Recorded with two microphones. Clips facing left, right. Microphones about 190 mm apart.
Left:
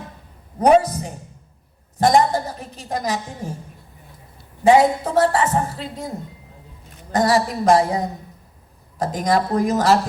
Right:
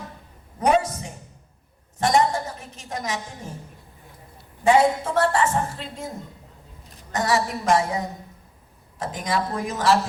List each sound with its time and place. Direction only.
0.6 s a woman's voice: 35° left (ahead or behind)
4.6 s a woman's voice: 40° left (ahead or behind)
7.1 s a woman's voice: 35° left (ahead or behind)